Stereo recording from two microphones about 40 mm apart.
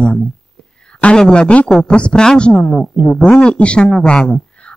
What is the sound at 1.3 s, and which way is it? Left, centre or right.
Speech, left.